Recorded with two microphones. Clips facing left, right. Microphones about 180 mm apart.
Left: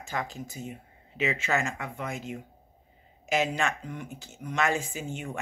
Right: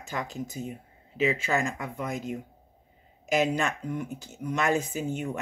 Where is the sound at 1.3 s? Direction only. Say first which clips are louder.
Even; 35° right (ahead or behind).